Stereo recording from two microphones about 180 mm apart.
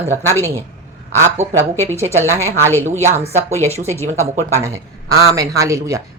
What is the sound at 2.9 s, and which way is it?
Speech, 40° right (ahead or behind).